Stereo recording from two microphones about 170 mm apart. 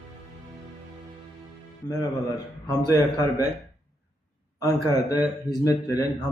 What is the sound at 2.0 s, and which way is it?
Speech, 20° left (ahead or behind).